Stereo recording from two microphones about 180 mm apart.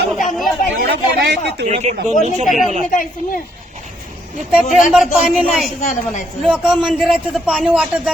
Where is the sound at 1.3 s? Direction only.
65° right (ahead or behind).